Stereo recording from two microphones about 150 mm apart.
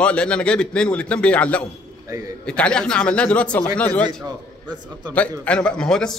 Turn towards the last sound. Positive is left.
turn(degrees=5)  # may be behind; listen again after turning